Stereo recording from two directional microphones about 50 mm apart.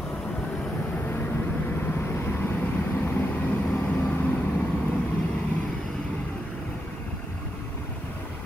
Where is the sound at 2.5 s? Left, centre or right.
Left.